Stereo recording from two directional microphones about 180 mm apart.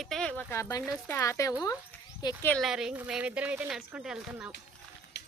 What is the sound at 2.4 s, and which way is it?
A woman's voice, centre (ahead or behind).